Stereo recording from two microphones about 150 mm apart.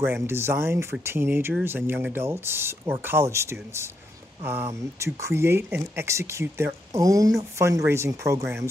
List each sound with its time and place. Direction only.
0.0 s speech: 15° right (ahead or behind)
5.0 s speech: 20° right (ahead or behind)